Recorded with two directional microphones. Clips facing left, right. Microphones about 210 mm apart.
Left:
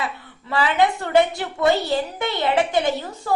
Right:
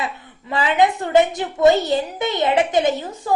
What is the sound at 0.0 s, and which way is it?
A woman's voice, 20° right (ahead or behind).